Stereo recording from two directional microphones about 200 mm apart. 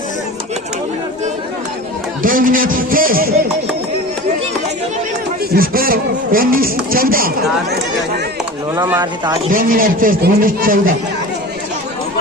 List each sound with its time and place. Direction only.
2.2 s chopping: 45° right (ahead or behind)
5.5 s chopping: 45° right (ahead or behind)
8.7 s speech: 20° right (ahead or behind)
9.5 s chopping: 45° right (ahead or behind)